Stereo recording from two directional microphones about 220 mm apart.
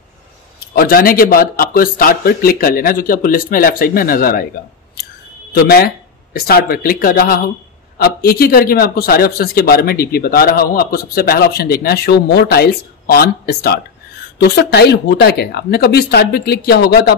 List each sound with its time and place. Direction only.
0.7 s a man's voice: 40° left (ahead or behind)
5.5 s a man's voice: 45° left (ahead or behind)